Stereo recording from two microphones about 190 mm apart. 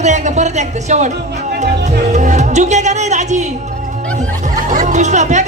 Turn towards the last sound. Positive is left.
turn(degrees=-40)  # may be behind; listen again after turning